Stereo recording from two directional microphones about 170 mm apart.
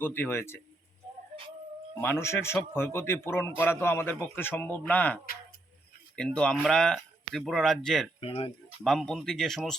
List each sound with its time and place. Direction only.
0.0 s a man's voice: 15° left (ahead or behind)
2.0 s a man's voice: 15° left (ahead or behind)
8.2 s speech: 30° left (ahead or behind)
8.8 s speech: centre (ahead or behind)